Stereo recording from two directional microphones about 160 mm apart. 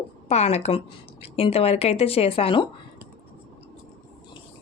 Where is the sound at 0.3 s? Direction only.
40° left (ahead or behind).